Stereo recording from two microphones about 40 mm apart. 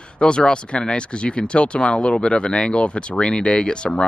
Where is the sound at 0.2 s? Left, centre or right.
Left.